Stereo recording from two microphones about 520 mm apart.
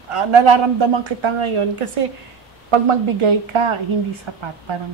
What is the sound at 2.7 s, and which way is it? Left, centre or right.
Speech, right.